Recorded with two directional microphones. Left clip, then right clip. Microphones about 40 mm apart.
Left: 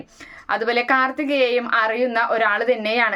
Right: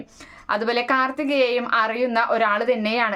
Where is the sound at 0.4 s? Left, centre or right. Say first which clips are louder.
Left 2 dB; right.